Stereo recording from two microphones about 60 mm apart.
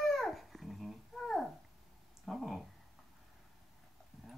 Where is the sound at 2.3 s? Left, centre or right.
Centre.